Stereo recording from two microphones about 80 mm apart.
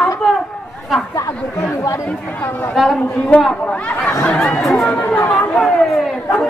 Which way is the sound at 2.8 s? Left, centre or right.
Centre.